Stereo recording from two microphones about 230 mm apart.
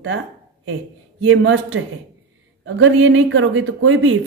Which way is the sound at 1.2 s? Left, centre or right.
Right.